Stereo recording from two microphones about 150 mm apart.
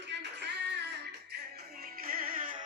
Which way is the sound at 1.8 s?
75° right (ahead or behind).